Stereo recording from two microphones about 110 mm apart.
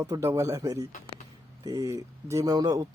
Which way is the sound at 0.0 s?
30° right (ahead or behind).